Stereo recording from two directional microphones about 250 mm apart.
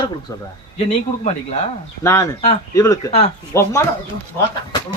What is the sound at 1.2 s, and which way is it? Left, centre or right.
Speech, left.